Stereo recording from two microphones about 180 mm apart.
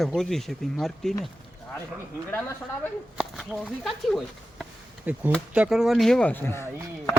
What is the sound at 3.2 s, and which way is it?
Speech, centre (ahead or behind).